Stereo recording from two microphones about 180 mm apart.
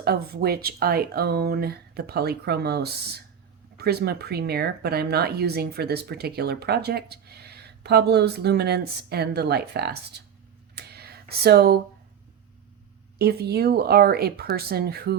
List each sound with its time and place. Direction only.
0.0 s speech: 60° right (ahead or behind)
10.8 s a sound: 60° right (ahead or behind)
13.1 s speech: 60° right (ahead or behind)